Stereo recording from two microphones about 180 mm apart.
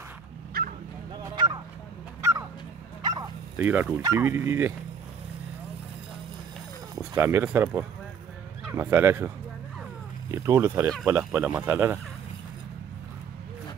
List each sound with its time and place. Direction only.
0.5 s bow-wow: 55° right (ahead or behind)
1.1 s bow-wow: 25° right (ahead or behind)
3.0 s bow-wow: 20° right (ahead or behind)
3.5 s speech: 10° right (ahead or behind)
7.0 s speech: 15° right (ahead or behind)
10.3 s speech: 15° right (ahead or behind)